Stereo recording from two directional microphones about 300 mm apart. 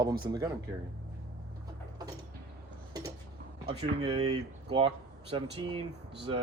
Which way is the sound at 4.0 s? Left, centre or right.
Centre.